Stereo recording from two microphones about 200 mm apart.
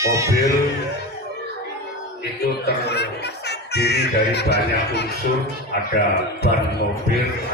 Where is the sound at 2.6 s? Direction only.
55° left (ahead or behind).